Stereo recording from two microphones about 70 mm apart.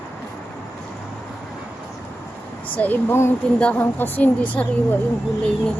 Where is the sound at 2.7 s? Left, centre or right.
Left.